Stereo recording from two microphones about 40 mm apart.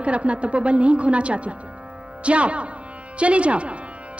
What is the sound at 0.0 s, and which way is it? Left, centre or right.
A man's voice, right.